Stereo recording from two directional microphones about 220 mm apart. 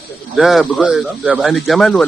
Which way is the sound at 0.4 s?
Centre (ahead or behind).